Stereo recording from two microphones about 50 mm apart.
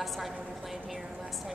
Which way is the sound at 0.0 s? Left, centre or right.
Centre.